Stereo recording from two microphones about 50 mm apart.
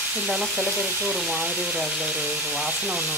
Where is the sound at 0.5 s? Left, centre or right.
Right.